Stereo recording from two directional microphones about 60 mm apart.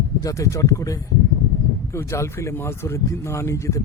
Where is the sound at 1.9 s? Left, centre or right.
Left.